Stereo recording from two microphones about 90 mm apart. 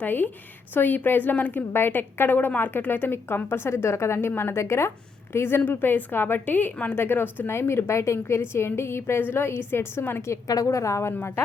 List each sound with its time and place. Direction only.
0.0 s a woman's voice: 20° left (ahead or behind)